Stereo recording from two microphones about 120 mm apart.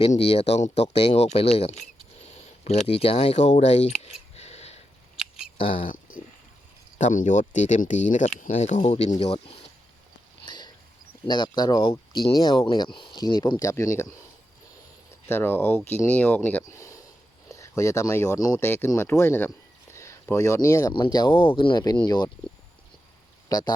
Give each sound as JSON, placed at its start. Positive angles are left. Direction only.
{"t": 0.2, "sound": "speech", "side_deg": 55}
{"t": 5.5, "sound": "a sound", "side_deg": 45}
{"t": 7.0, "sound": "speech", "side_deg": 90}
{"t": 10.4, "sound": "a sound", "side_deg": 40}
{"t": 11.3, "sound": "speech", "side_deg": 35}
{"t": 13.6, "sound": "speech", "side_deg": 25}
{"t": 15.3, "sound": "speech", "side_deg": 20}
{"t": 20.9, "sound": "speech", "side_deg": 40}
{"t": 23.5, "sound": "speech", "side_deg": 30}